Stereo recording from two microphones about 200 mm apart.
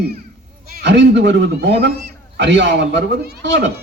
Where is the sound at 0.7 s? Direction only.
55° right (ahead or behind).